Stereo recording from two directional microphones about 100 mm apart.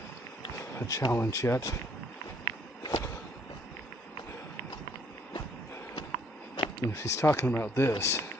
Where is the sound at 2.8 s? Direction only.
40° left (ahead or behind).